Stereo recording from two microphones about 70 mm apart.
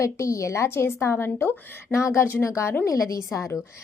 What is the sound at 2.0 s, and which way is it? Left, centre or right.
Speech, left.